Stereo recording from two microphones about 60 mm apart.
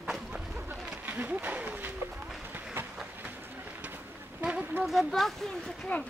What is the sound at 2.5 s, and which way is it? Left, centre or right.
Train, right.